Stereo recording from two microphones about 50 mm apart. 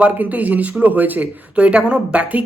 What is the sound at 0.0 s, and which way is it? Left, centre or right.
Speech, right.